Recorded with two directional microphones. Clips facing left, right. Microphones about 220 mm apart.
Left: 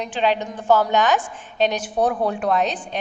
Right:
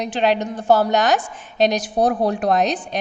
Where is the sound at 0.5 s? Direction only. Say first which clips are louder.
Right 2 dB; 40° right (ahead or behind).